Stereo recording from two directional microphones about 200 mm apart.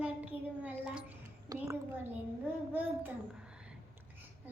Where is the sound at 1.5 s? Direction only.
20° right (ahead or behind).